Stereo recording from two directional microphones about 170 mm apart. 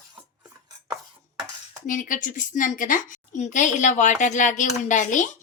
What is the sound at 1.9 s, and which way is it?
A woman's voice, 50° left (ahead or behind).